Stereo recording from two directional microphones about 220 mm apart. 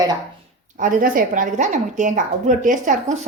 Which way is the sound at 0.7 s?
40° right (ahead or behind).